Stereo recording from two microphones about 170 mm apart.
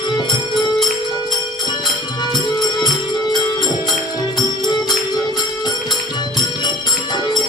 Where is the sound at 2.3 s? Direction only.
25° left (ahead or behind).